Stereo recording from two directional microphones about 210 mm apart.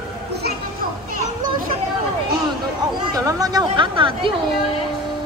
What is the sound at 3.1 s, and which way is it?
Chatter, 15° right (ahead or behind).